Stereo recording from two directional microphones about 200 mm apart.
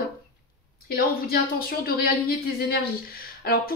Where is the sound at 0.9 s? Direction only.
50° left (ahead or behind).